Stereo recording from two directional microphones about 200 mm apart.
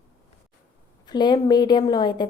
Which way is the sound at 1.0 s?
20° left (ahead or behind).